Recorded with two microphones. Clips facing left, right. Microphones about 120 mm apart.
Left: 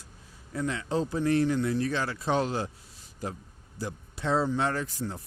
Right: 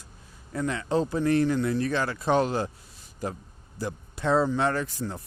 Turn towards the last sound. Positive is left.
turn(degrees=-65)  # may be behind; listen again after turning